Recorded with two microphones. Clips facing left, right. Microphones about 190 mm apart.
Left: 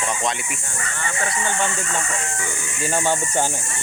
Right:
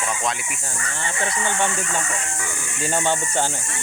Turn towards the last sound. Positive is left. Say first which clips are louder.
# left 1 dB
turn(degrees=5)  # may be behind; listen again after turning